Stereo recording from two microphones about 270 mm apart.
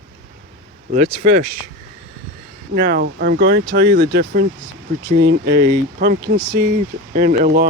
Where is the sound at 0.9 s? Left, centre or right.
Right.